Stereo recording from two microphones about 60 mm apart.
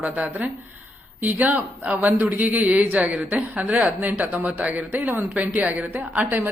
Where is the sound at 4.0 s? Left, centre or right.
Right.